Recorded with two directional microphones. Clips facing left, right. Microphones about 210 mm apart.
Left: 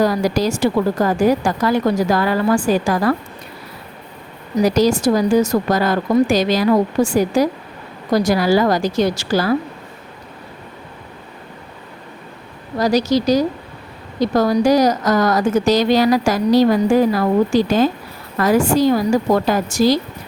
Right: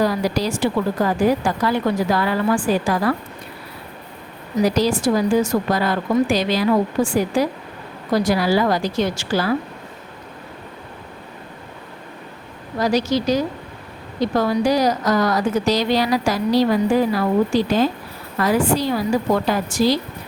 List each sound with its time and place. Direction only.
0.0 s a woman's voice: 45° left (ahead or behind)
4.6 s a woman's voice: 45° left (ahead or behind)
12.8 s a woman's voice: 40° left (ahead or behind)